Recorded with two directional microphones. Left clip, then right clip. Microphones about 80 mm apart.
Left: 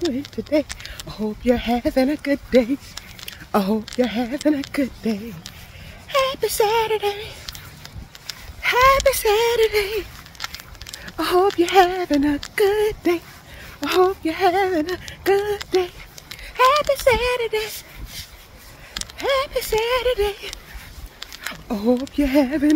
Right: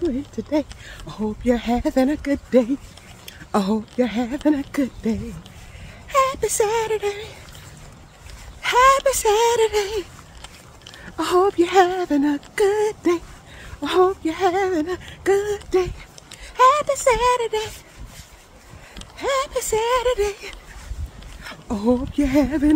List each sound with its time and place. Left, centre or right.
0.8 s speech: right
4.7 s a sound: right
6.0 s speech: right
8.5 s speech: right
9.2 s a sound: right
11.1 s speech: right
13.9 s speech: centre; by 17.7 s right
19.1 s speech: right
19.5 s a sound: right
21.5 s speech: right